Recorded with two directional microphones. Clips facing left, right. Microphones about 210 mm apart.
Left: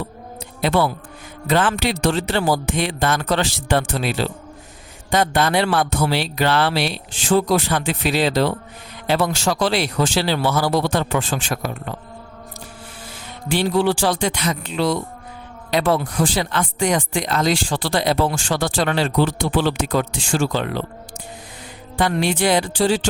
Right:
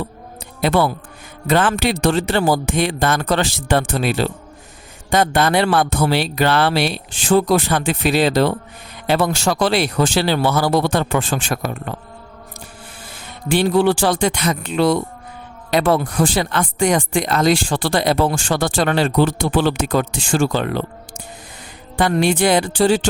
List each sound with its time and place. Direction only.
0.6 s speech: 55° right (ahead or behind)
13.5 s speech: 55° right (ahead or behind)
21.9 s speech: 45° right (ahead or behind)